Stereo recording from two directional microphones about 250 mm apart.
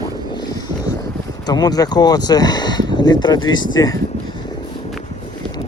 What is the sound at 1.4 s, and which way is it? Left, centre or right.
Speech, centre.